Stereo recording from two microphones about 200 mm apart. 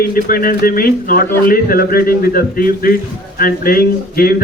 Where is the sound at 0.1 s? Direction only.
45° left (ahead or behind).